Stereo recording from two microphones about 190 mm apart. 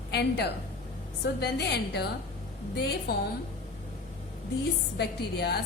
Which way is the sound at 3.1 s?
55° left (ahead or behind).